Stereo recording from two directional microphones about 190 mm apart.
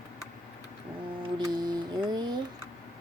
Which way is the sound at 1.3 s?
20° right (ahead or behind).